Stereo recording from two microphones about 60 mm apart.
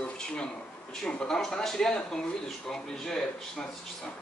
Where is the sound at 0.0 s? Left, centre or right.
Centre.